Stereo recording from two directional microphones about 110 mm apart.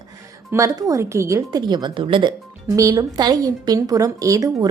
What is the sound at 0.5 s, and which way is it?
Speech, 30° right (ahead or behind).